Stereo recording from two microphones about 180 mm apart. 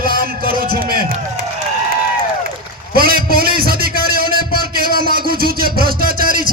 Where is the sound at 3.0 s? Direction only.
55° right (ahead or behind).